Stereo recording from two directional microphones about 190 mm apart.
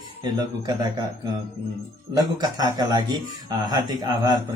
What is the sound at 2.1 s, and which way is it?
Speech, 20° right (ahead or behind).